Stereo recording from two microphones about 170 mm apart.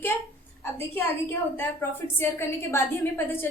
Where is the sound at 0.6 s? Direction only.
15° left (ahead or behind).